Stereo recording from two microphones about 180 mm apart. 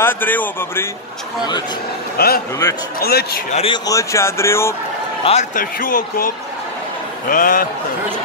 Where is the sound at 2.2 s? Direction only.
60° left (ahead or behind).